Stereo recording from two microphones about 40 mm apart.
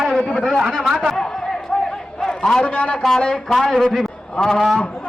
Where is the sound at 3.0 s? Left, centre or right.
Centre.